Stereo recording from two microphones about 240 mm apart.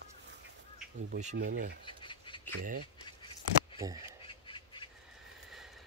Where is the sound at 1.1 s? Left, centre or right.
Right.